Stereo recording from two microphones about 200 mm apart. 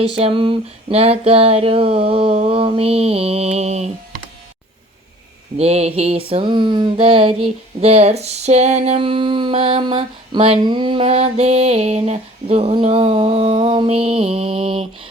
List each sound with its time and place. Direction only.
0.2 s mantra: 25° right (ahead or behind)
5.5 s mantra: 30° right (ahead or behind)